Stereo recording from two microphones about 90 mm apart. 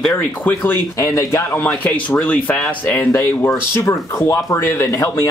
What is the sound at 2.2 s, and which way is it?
Speech, 20° left (ahead or behind).